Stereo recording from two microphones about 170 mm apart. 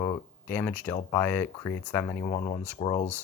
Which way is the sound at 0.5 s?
10° left (ahead or behind).